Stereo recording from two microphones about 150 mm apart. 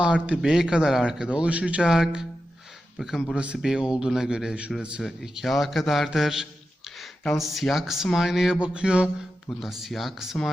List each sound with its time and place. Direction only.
0.0 s a man's voice: 5° right (ahead or behind)
9.5 s speech: 15° left (ahead or behind)
9.8 s a man's voice: centre (ahead or behind)